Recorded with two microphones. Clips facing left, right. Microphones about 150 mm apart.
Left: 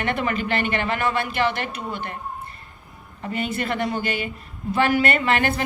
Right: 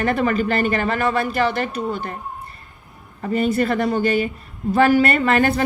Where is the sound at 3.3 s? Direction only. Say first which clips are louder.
Right 7 dB; 40° right (ahead or behind).